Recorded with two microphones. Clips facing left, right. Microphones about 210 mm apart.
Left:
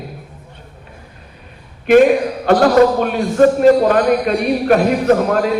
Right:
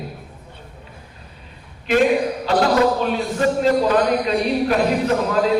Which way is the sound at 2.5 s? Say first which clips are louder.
Left 7 dB; 55° left (ahead or behind).